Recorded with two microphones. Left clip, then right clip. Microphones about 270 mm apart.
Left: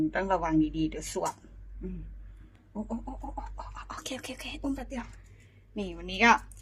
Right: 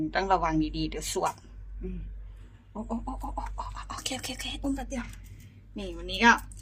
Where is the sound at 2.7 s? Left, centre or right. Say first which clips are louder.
Right 3 dB; centre.